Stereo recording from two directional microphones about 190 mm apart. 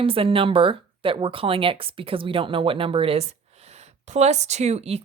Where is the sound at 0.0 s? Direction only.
30° right (ahead or behind).